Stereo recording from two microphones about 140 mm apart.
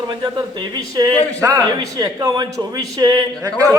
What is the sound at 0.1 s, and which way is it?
A man's voice, 35° right (ahead or behind).